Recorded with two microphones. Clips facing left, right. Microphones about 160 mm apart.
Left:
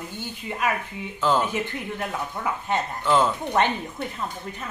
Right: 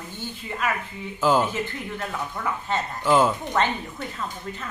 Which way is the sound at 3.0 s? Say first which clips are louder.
Right 2 dB; 5° right (ahead or behind).